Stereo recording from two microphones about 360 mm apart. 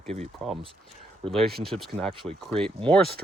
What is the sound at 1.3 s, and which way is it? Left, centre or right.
Speech, centre.